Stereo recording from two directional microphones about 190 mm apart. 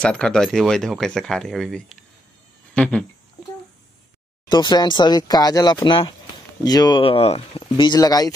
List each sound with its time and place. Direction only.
0.0 s speech: 5° left (ahead or behind)
2.7 s a sound: 5° left (ahead or behind)
4.5 s speech: 25° left (ahead or behind)